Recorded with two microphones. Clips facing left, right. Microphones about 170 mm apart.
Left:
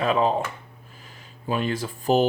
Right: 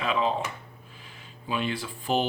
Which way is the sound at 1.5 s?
45° left (ahead or behind).